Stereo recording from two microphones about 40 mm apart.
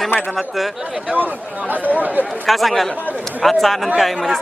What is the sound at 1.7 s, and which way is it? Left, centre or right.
Speech, right.